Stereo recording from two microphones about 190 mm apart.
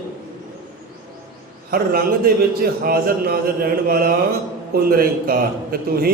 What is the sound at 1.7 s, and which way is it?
Speech, 50° right (ahead or behind).